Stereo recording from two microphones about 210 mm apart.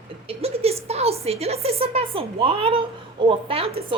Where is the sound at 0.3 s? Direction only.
30° right (ahead or behind).